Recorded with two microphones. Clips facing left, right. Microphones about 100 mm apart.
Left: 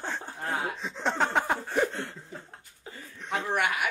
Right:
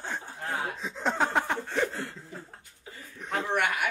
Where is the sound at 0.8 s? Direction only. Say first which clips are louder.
Right 2 dB; centre (ahead or behind).